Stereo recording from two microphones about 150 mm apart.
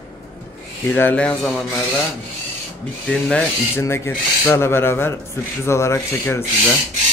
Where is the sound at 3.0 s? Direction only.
5° left (ahead or behind).